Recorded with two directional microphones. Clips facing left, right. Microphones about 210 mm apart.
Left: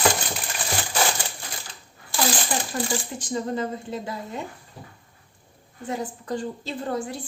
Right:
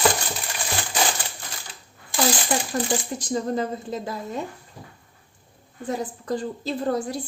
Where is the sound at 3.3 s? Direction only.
40° right (ahead or behind).